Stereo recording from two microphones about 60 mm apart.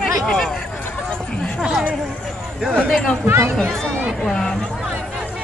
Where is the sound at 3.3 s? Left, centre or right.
Right.